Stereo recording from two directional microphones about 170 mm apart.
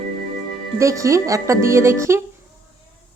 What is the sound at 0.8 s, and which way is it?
Speech, 20° right (ahead or behind).